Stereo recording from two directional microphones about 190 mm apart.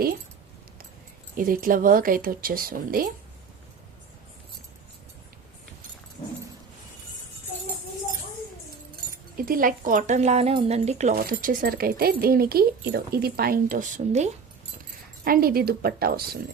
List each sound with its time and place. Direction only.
1.4 s speech: 45° right (ahead or behind)
9.5 s speech: 45° right (ahead or behind)
15.2 s speech: 50° right (ahead or behind)